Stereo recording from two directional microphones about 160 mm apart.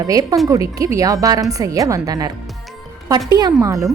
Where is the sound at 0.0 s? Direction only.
20° right (ahead or behind).